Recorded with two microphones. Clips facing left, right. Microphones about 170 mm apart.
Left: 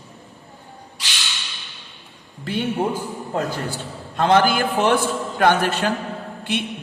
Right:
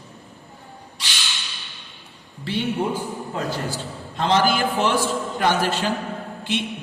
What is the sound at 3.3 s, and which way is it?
A man's voice, 55° left (ahead or behind).